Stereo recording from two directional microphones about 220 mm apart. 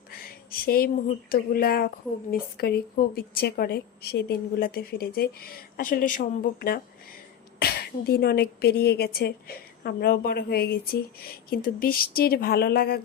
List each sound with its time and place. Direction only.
0.5 s a woman's voice: 40° left (ahead or behind)